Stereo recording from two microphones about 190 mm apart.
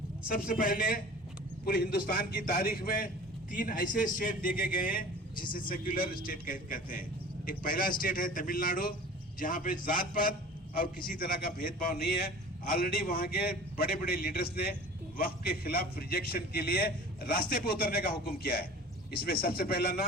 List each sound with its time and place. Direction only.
0.3 s a man's voice: 50° left (ahead or behind)